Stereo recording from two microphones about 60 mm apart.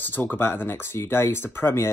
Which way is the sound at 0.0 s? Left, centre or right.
Left.